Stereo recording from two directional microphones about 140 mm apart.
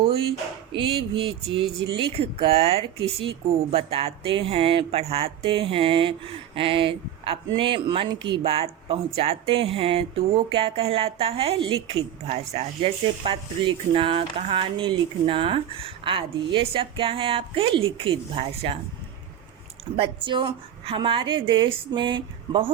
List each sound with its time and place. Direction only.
0.0 s a sound: 40° right (ahead or behind)
0.7 s speech: 35° right (ahead or behind)
20.0 s speech: 35° right (ahead or behind)